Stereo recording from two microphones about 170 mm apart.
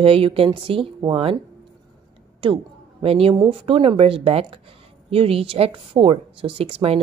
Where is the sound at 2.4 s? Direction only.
35° right (ahead or behind).